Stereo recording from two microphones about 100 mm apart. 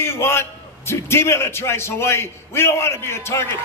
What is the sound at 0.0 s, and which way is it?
A man's voice, 25° left (ahead or behind).